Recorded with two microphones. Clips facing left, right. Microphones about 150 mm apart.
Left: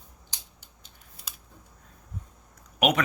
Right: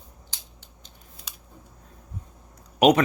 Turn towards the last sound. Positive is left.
turn(degrees=-35)  # may be behind; listen again after turning